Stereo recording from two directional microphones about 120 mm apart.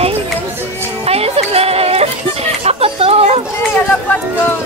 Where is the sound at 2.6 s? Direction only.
55° right (ahead or behind).